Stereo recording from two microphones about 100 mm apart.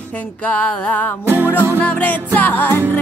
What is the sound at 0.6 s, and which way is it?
Music, 15° left (ahead or behind).